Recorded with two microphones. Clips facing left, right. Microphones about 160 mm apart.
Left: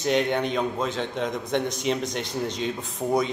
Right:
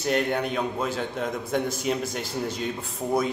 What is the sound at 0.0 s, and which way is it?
A man's voice, 5° right (ahead or behind).